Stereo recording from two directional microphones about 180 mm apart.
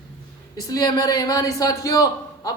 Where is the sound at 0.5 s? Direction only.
20° left (ahead or behind).